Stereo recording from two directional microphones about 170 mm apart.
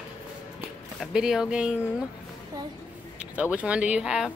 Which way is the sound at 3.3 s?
10° right (ahead or behind).